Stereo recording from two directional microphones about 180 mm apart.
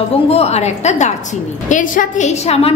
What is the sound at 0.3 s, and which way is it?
A woman's voice, 35° left (ahead or behind).